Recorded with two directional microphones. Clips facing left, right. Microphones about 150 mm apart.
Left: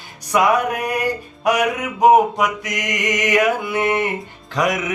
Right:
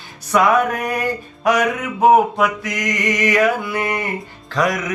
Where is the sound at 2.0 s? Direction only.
15° left (ahead or behind).